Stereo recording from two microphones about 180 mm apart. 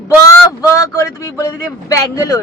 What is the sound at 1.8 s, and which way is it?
Speech, 20° left (ahead or behind).